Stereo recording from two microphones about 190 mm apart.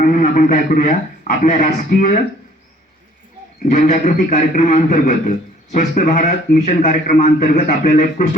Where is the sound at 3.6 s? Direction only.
45° left (ahead or behind).